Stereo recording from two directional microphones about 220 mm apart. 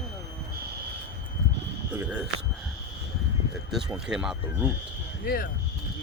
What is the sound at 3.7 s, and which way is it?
Speech, 5° right (ahead or behind).